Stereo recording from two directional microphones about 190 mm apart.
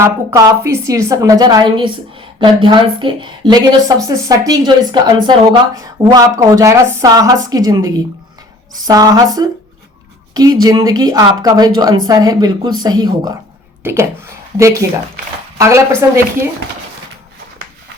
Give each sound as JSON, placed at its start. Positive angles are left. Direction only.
{"t": 0.0, "sound": "a woman's voice", "side_deg": -15}
{"t": 15.5, "sound": "a woman's voice", "side_deg": -15}